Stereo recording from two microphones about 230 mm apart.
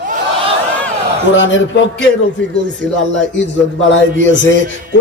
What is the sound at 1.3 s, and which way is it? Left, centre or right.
Mantra, left.